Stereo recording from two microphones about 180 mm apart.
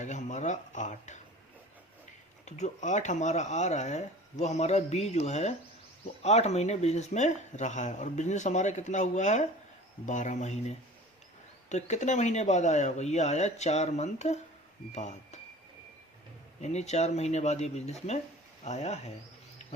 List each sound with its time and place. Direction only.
0.0 s speech: 40° left (ahead or behind)
2.4 s speech: 40° left (ahead or behind)
16.6 s speech: 40° left (ahead or behind)